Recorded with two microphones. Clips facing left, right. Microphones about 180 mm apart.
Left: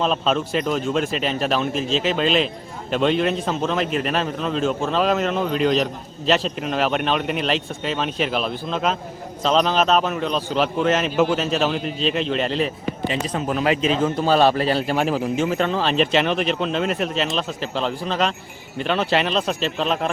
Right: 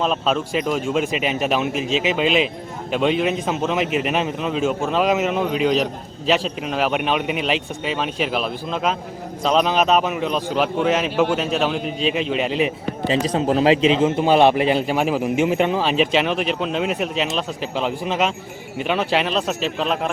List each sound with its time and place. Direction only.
0.0 s speech: 5° right (ahead or behind)
13.1 s speech: 35° right (ahead or behind); by 20.1 s 5° right (ahead or behind)